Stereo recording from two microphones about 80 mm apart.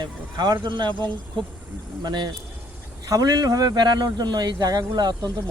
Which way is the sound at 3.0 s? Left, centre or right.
Right.